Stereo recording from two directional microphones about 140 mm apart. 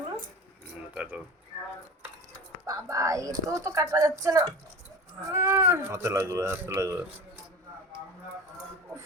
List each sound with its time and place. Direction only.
0.9 s speech: 10° right (ahead or behind)
2.6 s speech: 25° right (ahead or behind)